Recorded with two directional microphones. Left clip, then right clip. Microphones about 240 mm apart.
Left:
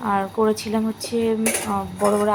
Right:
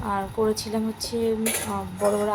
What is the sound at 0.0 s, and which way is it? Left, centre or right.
A woman's voice, centre.